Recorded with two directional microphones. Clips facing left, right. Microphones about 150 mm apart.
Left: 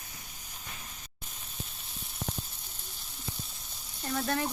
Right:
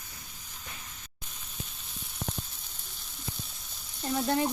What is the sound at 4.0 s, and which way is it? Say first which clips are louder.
Speech: right 4 dB; 15° right (ahead or behind).